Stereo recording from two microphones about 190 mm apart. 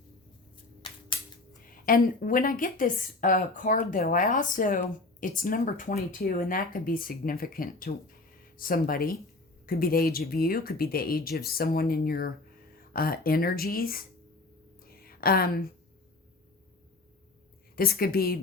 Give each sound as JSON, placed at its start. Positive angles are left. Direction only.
{"t": 1.8, "sound": "a woman's voice", "side_deg": 45}
{"t": 14.8, "sound": "a sound", "side_deg": 50}
{"t": 17.7, "sound": "a woman's voice", "side_deg": 50}